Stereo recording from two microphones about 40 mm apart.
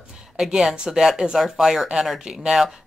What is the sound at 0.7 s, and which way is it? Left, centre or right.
Speech, centre.